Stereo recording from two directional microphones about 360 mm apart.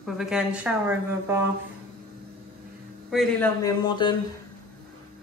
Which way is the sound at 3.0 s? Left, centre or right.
Centre.